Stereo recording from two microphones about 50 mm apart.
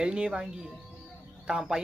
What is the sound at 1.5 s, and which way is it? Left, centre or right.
Speech, centre.